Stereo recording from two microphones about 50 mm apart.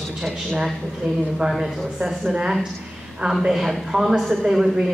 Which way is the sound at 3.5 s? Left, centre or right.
Centre.